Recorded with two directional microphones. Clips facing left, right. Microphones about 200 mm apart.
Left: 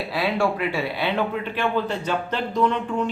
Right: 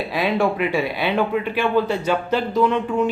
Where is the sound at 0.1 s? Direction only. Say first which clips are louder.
Right 2 dB; 20° right (ahead or behind).